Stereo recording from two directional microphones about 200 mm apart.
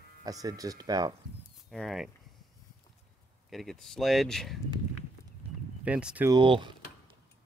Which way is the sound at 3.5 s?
Centre (ahead or behind).